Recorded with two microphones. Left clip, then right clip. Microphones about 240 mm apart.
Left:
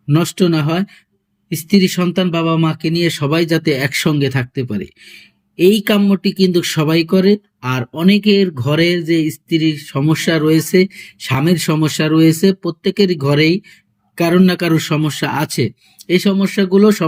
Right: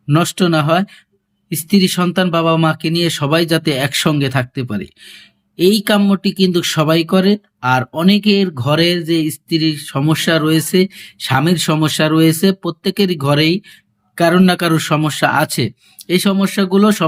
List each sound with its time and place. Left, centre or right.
0.1 s speech: centre